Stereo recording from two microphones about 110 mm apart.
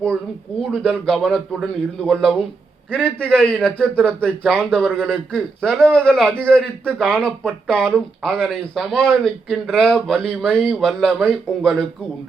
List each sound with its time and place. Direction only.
0.6 s speech: centre (ahead or behind)